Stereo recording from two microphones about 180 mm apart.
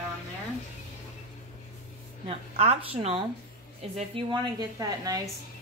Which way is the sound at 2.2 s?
35° right (ahead or behind).